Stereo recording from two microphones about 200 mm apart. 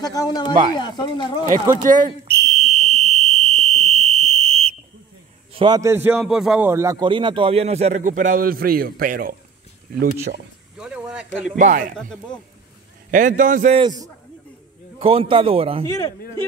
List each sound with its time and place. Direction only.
0.0 s speech: 20° left (ahead or behind)
1.9 s a man's voice: 20° right (ahead or behind)
2.5 s fire alarm: 35° right (ahead or behind)
5.5 s a man's voice: 20° right (ahead or behind); by 9.4 s 45° right (ahead or behind)
10.8 s speech: 5° right (ahead or behind)
11.5 s a man's voice: 40° right (ahead or behind)
13.1 s a man's voice: 40° right (ahead or behind)
13.7 s a man's voice: 20° right (ahead or behind)